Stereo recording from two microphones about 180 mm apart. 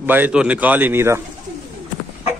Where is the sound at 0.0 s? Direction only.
10° right (ahead or behind).